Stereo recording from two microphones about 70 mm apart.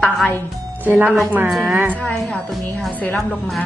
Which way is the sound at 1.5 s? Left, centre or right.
Centre.